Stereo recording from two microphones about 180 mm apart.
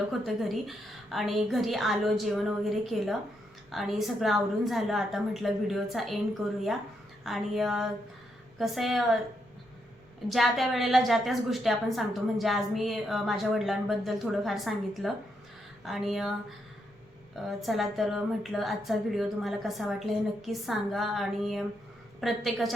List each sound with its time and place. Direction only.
0.1 s a woman's voice: centre (ahead or behind)
7.3 s a woman's voice: centre (ahead or behind)
10.2 s a woman's voice: centre (ahead or behind)
17.6 s a woman's voice: centre (ahead or behind)